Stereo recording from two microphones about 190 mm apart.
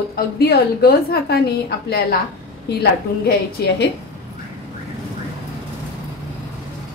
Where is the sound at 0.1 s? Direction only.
55° left (ahead or behind).